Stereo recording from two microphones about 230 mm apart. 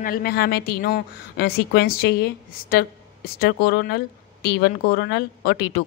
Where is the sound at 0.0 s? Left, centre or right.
Left.